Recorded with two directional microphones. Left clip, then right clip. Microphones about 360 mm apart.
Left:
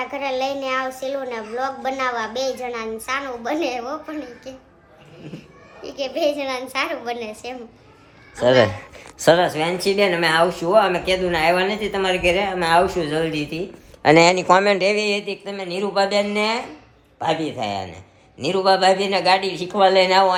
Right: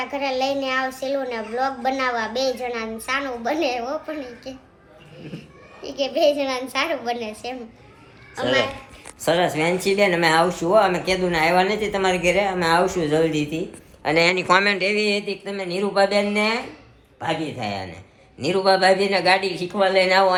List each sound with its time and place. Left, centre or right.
0.0 s a woman's voice: centre
5.8 s a woman's voice: centre
8.5 s speech: left
9.4 s a woman's voice: centre
14.0 s speech: left
14.3 s a woman's voice: centre